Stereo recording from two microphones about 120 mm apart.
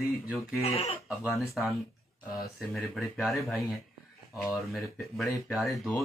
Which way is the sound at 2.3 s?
Centre (ahead or behind).